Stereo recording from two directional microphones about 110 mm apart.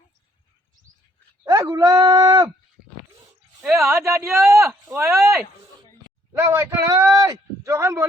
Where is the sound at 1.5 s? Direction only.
35° right (ahead or behind).